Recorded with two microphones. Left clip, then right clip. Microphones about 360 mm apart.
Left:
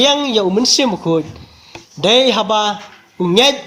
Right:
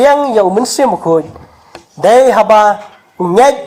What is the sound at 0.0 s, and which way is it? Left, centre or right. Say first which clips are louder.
A man's voice: right 6 dB; right.